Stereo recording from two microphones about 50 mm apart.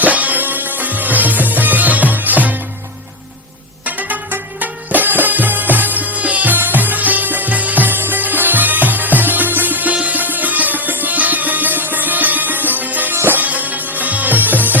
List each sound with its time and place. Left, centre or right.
0.0 s music: right
3.8 s music: right